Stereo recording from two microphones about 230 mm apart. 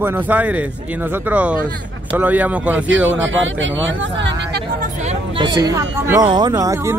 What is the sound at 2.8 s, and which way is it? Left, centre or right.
Speech, right.